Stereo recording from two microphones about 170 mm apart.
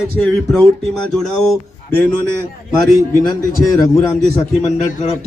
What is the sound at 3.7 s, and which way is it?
Speech, 20° left (ahead or behind).